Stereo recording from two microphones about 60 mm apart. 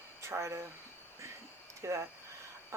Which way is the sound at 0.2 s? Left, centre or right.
Right.